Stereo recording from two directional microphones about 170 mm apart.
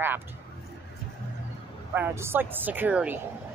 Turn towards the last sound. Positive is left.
turn(degrees=-10)  # may be behind; listen again after turning